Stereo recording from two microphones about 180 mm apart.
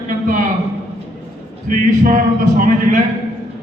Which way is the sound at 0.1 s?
50° right (ahead or behind).